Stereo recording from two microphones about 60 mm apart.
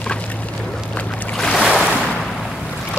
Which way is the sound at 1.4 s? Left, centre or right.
Centre.